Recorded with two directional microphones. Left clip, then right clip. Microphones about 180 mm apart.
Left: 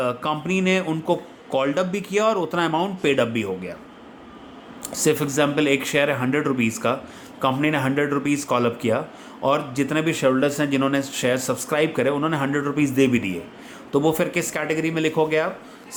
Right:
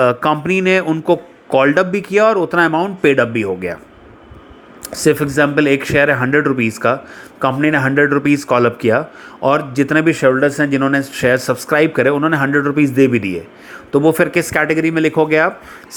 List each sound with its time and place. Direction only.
0.0 s speech: 35° right (ahead or behind)
4.9 s speech: 25° right (ahead or behind)